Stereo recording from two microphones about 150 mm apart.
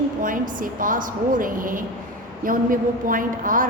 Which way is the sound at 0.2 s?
65° right (ahead or behind).